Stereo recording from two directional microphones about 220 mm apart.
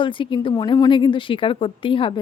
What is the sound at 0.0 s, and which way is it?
A woman's voice, 20° left (ahead or behind).